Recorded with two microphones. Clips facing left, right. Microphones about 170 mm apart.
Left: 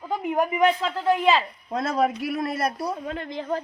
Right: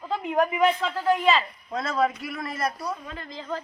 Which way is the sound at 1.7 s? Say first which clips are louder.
Left 3 dB; 50° left (ahead or behind).